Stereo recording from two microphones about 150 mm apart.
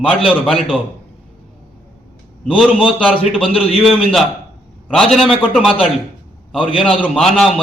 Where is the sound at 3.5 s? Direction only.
40° left (ahead or behind).